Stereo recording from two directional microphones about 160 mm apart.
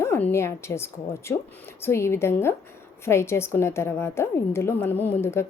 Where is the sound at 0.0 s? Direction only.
15° left (ahead or behind).